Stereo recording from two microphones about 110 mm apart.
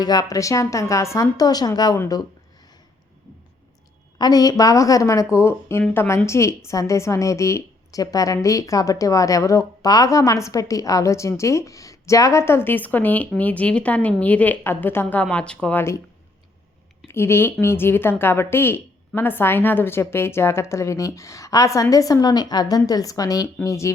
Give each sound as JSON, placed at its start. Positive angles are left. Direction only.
{"t": 0.0, "sound": "a woman's voice", "side_deg": 35}
{"t": 4.2, "sound": "a woman's voice", "side_deg": 35}
{"t": 17.1, "sound": "a woman's voice", "side_deg": 20}